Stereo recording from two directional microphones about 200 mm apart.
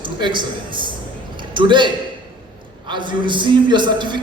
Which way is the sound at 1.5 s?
25° right (ahead or behind).